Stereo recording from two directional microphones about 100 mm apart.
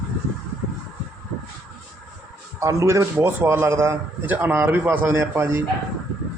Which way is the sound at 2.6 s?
30° right (ahead or behind).